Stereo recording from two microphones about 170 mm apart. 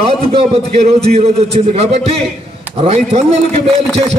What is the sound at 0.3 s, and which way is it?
A man's voice, 35° right (ahead or behind).